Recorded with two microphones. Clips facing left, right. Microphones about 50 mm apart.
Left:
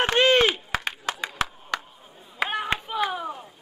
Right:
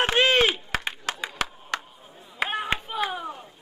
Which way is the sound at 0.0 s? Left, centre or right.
Centre.